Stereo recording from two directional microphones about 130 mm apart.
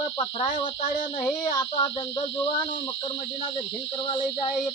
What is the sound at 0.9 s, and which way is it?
Child singing, 75° left (ahead or behind).